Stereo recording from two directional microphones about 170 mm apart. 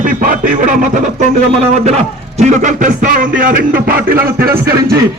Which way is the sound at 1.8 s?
40° right (ahead or behind).